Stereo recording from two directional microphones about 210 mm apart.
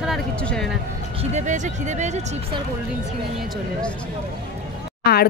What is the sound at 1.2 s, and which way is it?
Speech, 35° right (ahead or behind).